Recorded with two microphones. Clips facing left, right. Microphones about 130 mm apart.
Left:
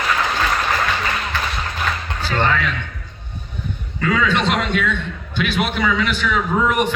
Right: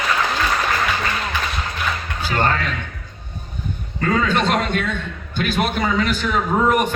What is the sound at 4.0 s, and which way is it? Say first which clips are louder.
A man's voice: even; 45° right (ahead or behind).